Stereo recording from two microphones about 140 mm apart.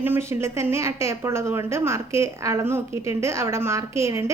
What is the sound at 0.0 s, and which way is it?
A woman's voice, 15° right (ahead or behind).